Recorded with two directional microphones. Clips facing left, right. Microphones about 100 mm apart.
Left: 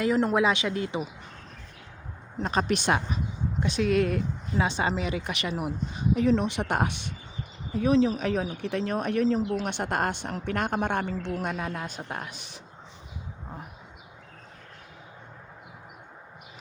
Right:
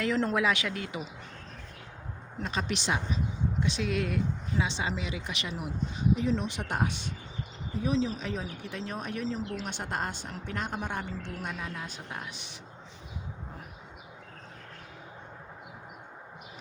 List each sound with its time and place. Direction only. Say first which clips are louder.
0.0 s a woman's voice: left 4 dB; 15° left (ahead or behind)
2.4 s speech: left 7 dB; 45° left (ahead or behind)